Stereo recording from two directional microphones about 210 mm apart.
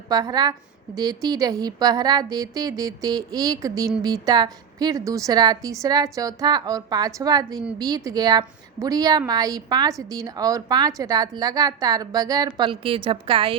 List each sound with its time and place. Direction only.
0.1 s a woman's voice: 20° right (ahead or behind)